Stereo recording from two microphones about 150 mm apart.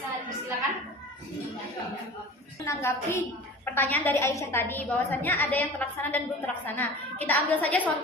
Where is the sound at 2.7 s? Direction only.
15° left (ahead or behind).